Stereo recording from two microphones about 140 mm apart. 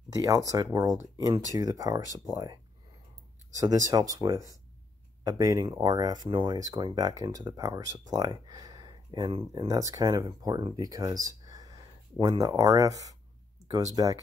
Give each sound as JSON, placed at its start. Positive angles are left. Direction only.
{"t": 0.1, "sound": "speech", "side_deg": -25}
{"t": 3.6, "sound": "speech", "side_deg": -25}